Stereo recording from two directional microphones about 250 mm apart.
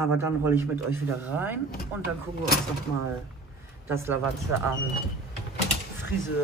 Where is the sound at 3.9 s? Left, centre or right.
Centre.